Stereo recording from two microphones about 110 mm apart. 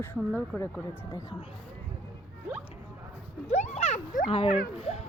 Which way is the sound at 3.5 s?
90° left.